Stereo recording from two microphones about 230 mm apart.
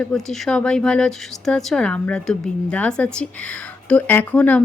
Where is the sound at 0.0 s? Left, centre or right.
Centre.